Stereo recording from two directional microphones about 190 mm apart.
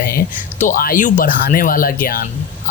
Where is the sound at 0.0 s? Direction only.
50° left (ahead or behind).